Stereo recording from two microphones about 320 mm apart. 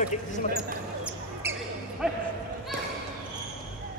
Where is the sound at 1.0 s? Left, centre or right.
Centre.